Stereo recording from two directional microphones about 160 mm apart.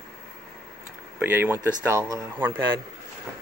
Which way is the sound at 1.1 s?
10° right (ahead or behind).